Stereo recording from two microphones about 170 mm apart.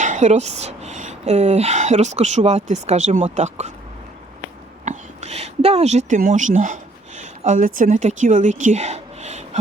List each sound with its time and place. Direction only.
0.0 s speech: 45° right (ahead or behind)
4.9 s a woman's voice: 40° right (ahead or behind)